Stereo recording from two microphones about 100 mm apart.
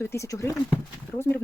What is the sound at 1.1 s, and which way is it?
Speech, 20° left (ahead or behind).